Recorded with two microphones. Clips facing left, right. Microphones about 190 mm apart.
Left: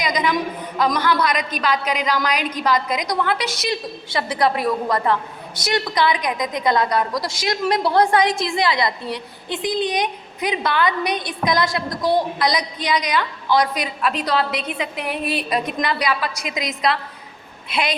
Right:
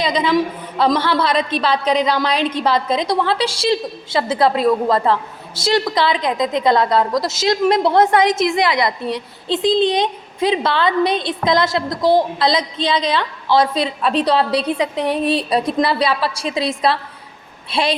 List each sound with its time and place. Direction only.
0.0 s a woman's voice: 25° right (ahead or behind)